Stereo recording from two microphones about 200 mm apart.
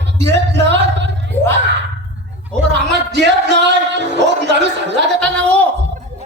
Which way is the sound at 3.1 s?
60° right (ahead or behind).